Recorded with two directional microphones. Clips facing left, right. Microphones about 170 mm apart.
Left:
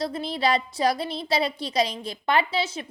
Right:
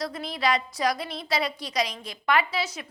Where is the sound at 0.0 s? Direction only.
30° left (ahead or behind).